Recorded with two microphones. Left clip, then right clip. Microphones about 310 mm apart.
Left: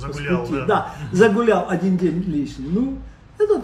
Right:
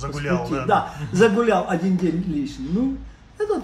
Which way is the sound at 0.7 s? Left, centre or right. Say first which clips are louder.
Right 1 dB; centre.